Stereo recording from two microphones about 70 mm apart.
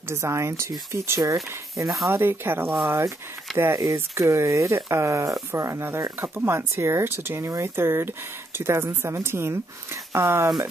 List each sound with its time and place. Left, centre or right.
0.1 s speech: right
1.9 s speech: centre
2.1 s speech: right
3.7 s speech: right
6.2 s speech: right